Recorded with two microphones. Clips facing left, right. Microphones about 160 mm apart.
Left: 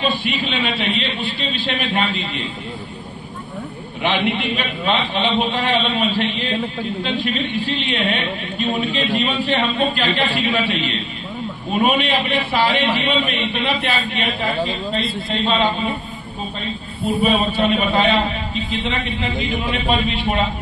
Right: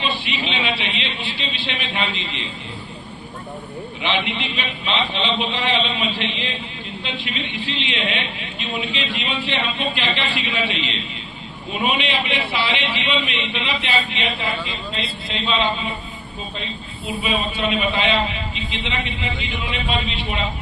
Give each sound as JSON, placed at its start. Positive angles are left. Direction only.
{"t": 0.0, "sound": "a man's voice", "side_deg": 45}
{"t": 4.0, "sound": "a man's voice", "side_deg": 50}
{"t": 17.2, "sound": "a man's voice", "side_deg": 45}